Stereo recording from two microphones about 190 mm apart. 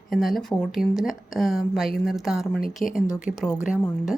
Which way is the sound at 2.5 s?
45° left (ahead or behind).